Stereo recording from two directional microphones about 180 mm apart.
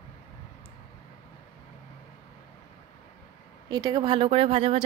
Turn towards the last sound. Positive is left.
turn(degrees=-30)  # may be behind; listen again after turning